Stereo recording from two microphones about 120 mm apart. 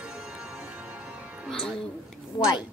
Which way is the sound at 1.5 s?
Centre (ahead or behind).